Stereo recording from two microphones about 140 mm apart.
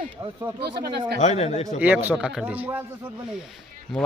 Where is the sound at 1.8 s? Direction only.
10° right (ahead or behind).